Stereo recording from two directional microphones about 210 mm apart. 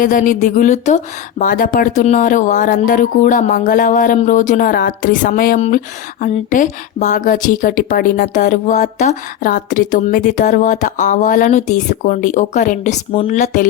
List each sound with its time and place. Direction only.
0.0 s a woman's voice: 40° left (ahead or behind)